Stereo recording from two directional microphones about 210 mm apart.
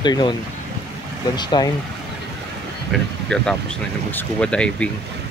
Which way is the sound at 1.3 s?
20° left (ahead or behind).